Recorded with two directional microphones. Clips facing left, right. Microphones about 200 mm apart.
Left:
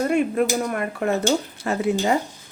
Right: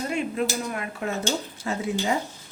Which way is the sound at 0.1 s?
50° left (ahead or behind).